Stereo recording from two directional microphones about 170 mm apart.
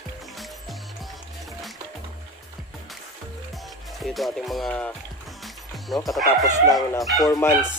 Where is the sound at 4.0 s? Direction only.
Centre (ahead or behind).